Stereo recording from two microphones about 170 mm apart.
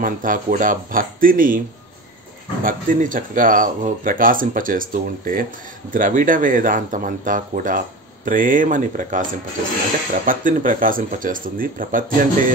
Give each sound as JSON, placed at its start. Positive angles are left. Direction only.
{"t": 0.0, "sound": "speech", "side_deg": -55}
{"t": 2.6, "sound": "speech", "side_deg": -50}